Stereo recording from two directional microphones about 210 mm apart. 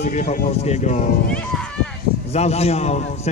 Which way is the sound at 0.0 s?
35° left (ahead or behind).